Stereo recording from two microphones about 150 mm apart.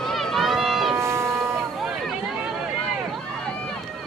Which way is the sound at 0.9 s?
20° right (ahead or behind).